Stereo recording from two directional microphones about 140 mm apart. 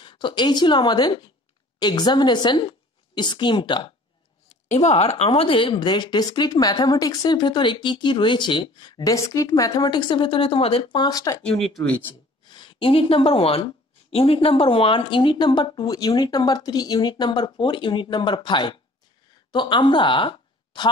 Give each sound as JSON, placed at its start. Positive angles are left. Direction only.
{"t": 0.0, "sound": "speech", "side_deg": 35}
{"t": 4.5, "sound": "speech", "side_deg": 55}
{"t": 11.4, "sound": "speech", "side_deg": 0}
{"t": 12.4, "sound": "speech", "side_deg": 35}